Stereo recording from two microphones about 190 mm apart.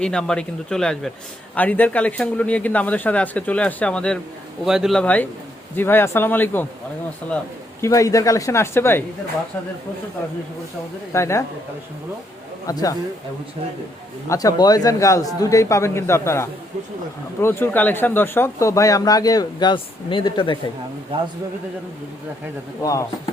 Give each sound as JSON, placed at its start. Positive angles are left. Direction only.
{"t": 0.0, "sound": "speech", "side_deg": 5}
{"t": 7.8, "sound": "speech", "side_deg": 15}
{"t": 11.1, "sound": "speech", "side_deg": 15}
{"t": 12.6, "sound": "speech", "side_deg": 20}
{"t": 14.3, "sound": "speech", "side_deg": 20}
{"t": 22.8, "sound": "speech", "side_deg": 15}